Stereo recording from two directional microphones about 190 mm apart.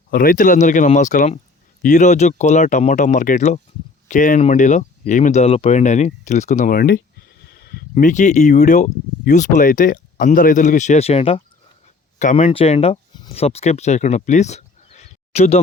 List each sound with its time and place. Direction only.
0.1 s speech: 45° left (ahead or behind)
7.5 s a sound: 55° left (ahead or behind)
7.9 s speech: 40° left (ahead or behind)